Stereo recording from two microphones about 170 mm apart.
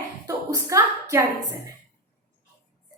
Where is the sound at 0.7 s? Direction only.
15° right (ahead or behind).